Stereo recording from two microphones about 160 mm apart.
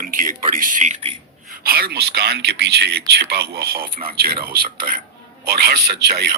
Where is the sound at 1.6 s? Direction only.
70° right (ahead or behind).